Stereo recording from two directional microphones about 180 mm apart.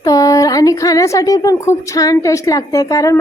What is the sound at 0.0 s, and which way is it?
A woman's voice, 20° left (ahead or behind).